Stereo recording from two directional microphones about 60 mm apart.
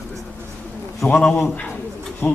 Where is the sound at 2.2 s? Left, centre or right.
Left.